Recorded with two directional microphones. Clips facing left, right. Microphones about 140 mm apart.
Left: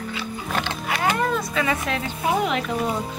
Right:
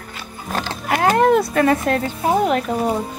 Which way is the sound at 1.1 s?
65° right (ahead or behind).